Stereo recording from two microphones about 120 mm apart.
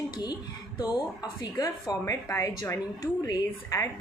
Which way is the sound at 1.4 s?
35° left (ahead or behind).